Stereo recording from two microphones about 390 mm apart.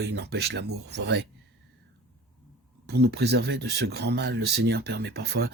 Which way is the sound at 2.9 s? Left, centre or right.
Right.